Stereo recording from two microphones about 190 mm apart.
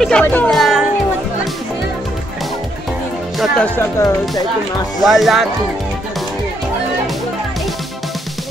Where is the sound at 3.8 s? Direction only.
15° left (ahead or behind).